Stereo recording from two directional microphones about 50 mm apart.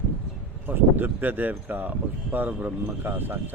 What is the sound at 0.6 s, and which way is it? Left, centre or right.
Speech, right.